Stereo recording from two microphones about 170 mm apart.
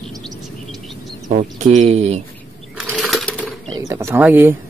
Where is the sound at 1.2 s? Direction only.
45° right (ahead or behind).